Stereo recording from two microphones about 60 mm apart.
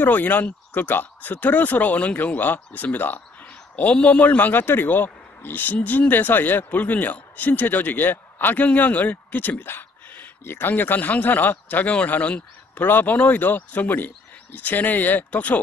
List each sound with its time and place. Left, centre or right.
0.0 s speech: left